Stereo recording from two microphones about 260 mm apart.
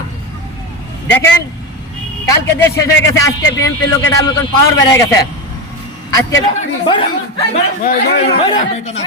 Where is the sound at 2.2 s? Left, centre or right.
Centre.